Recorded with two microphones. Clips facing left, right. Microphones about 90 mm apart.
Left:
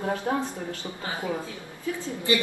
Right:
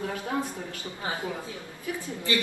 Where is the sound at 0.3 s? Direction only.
45° left (ahead or behind).